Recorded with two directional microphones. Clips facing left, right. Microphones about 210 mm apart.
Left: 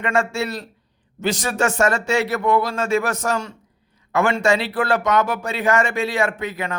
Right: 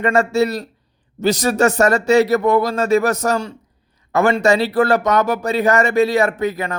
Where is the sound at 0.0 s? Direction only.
40° right (ahead or behind).